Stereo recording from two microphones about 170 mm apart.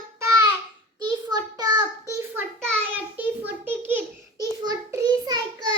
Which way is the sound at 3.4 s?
10° right (ahead or behind).